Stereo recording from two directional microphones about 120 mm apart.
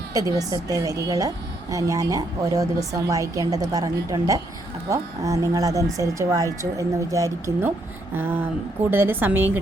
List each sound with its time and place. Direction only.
0.1 s a woman's voice: 30° right (ahead or behind)